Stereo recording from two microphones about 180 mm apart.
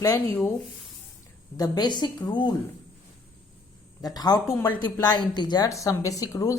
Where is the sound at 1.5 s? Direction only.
20° left (ahead or behind).